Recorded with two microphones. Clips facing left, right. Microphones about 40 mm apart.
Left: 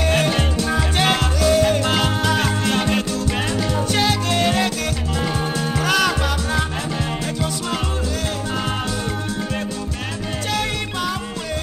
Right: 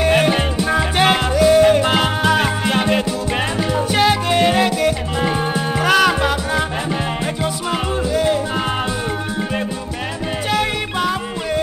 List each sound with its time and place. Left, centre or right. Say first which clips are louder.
0.0 s music: right 4 dB; centre